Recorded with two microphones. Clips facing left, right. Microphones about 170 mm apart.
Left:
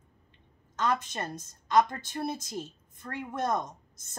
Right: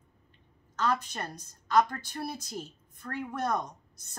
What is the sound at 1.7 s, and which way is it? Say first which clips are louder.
Speech: left 1 dB; 20° left (ahead or behind).